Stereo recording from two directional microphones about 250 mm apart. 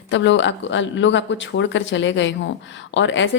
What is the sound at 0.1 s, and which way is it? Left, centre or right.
A woman's voice, left.